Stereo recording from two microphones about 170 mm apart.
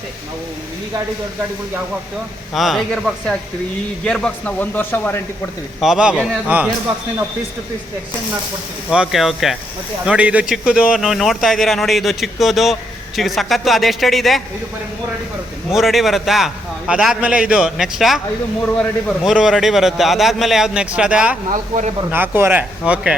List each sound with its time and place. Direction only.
2.5 s a man's voice: centre (ahead or behind)
5.8 s a man's voice: 5° right (ahead or behind)
8.9 s a man's voice: 5° right (ahead or behind)
15.7 s a man's voice: centre (ahead or behind)
21.5 s speech: 45° right (ahead or behind)
22.1 s speech: 10° right (ahead or behind)